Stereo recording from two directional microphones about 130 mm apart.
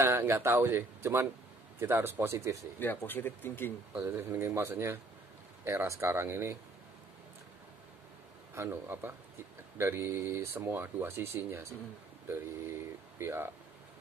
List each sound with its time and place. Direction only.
0.0 s speech: 20° right (ahead or behind)
2.8 s speech: 15° left (ahead or behind)
4.0 s speech: 20° right (ahead or behind)
8.5 s speech: 20° right (ahead or behind)
13.2 s speech: 15° right (ahead or behind)